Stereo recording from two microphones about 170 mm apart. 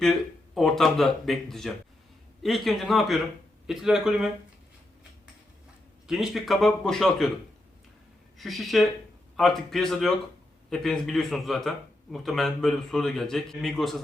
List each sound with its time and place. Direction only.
0.0 s a man's voice: centre (ahead or behind)
6.1 s a man's voice: centre (ahead or behind)
8.4 s a man's voice: centre (ahead or behind)